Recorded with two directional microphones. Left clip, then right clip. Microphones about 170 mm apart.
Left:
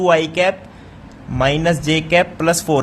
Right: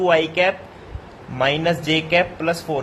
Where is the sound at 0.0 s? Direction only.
40° left (ahead or behind).